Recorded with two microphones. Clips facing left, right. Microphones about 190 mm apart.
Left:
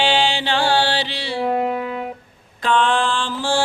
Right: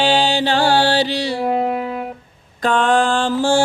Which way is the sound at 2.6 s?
45° right (ahead or behind).